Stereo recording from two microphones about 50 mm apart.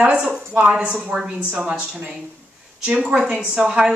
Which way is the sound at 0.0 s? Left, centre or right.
Right.